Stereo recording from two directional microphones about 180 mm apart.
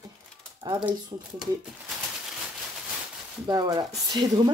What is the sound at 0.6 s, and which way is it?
Speech, 20° right (ahead or behind).